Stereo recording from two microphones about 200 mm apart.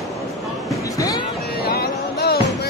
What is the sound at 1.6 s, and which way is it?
Music, 50° left (ahead or behind).